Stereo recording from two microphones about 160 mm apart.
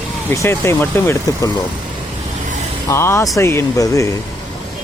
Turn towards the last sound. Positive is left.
turn(degrees=20)  # may be behind; listen again after turning